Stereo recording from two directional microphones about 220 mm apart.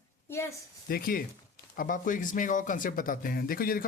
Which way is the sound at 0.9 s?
40° left (ahead or behind).